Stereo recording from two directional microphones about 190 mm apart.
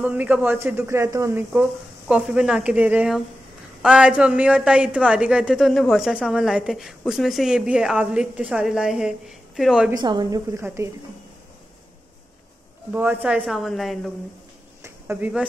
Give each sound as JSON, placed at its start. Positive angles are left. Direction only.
{"t": 0.0, "sound": "a woman's voice", "side_deg": -10}
{"t": 9.9, "sound": "speech", "side_deg": -20}
{"t": 12.9, "sound": "a woman's voice", "side_deg": -10}
{"t": 14.8, "sound": "a sound", "side_deg": -10}